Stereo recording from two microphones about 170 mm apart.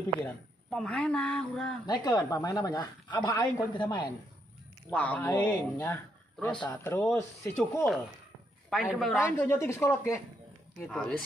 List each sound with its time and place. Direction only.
0.2 s speech: 5° left (ahead or behind)
1.9 s a woman's voice: 20° left (ahead or behind)
3.2 s a woman's voice: 10° left (ahead or behind); by 4.1 s 25° left (ahead or behind)
4.9 s speech: 10° left (ahead or behind)
8.6 s a woman's voice: centre (ahead or behind)
9.2 s speech: 15° left (ahead or behind)
10.9 s speech: 5° left (ahead or behind)